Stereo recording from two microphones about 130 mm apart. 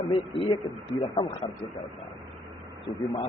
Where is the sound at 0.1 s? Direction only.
45° left (ahead or behind).